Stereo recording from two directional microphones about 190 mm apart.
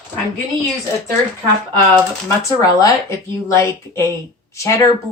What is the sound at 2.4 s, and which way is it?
A woman's voice, 20° left (ahead or behind).